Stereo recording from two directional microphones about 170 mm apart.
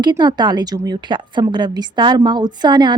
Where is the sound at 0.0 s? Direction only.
25° right (ahead or behind).